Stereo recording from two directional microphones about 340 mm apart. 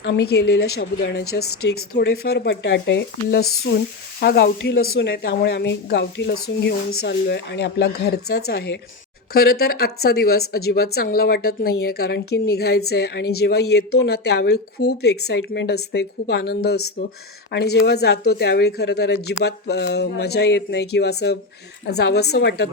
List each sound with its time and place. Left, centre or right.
0.5 s a woman's voice: left